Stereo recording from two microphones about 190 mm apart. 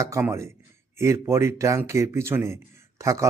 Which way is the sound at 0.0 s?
15° right (ahead or behind).